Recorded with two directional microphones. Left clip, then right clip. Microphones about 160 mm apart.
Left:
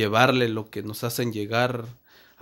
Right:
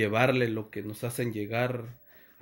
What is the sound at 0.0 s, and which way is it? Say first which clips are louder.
Speech: left 5 dB; 30° left (ahead or behind).